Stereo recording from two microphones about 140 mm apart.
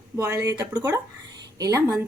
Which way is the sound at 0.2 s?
20° right (ahead or behind).